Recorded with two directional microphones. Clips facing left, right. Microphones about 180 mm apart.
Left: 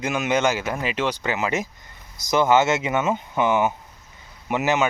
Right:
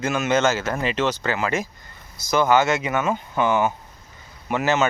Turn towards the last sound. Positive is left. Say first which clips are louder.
# even
turn(degrees=15)  # may be behind; listen again after turning